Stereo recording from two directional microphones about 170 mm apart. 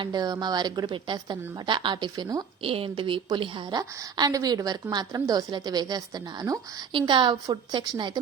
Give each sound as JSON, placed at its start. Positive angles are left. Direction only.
{"t": 0.0, "sound": "a woman's voice", "side_deg": -25}
{"t": 2.6, "sound": "a woman's voice", "side_deg": -35}